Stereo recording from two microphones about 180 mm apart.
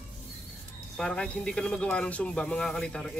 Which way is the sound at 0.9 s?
5° left (ahead or behind).